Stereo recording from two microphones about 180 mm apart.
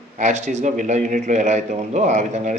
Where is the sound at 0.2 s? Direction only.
40° right (ahead or behind).